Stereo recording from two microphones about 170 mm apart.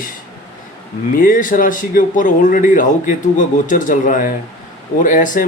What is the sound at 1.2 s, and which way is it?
A man's voice, 55° left (ahead or behind).